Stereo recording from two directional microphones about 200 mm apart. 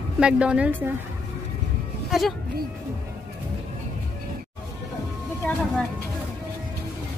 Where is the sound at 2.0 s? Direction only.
Centre (ahead or behind).